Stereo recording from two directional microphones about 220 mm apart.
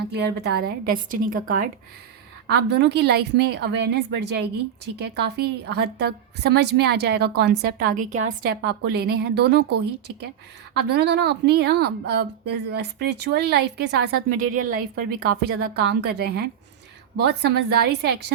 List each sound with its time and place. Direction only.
0.1 s a woman's voice: 50° right (ahead or behind)
2.5 s a woman's voice: 50° right (ahead or behind)
10.8 s a woman's voice: 50° right (ahead or behind)